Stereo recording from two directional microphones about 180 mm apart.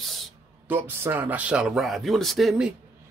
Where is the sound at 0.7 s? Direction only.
10° right (ahead or behind).